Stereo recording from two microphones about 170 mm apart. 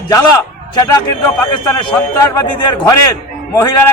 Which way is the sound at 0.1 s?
15° left (ahead or behind).